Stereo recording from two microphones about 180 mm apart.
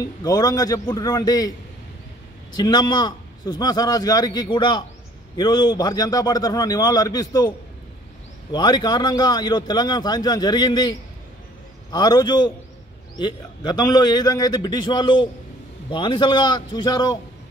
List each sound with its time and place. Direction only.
0.0 s speech: 20° left (ahead or behind)
2.5 s speech: 25° left (ahead or behind)